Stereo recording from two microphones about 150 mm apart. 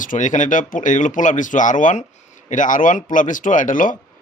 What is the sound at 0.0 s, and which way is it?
A man's voice, 60° left (ahead or behind).